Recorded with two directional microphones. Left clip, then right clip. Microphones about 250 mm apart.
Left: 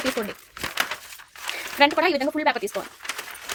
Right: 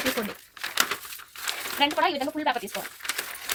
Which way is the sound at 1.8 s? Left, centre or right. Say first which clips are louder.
Left 5 dB; left.